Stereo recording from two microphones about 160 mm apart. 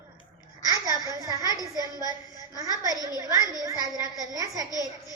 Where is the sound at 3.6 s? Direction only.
20° right (ahead or behind).